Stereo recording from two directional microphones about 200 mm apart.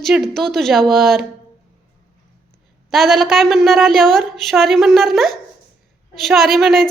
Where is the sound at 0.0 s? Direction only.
Centre (ahead or behind).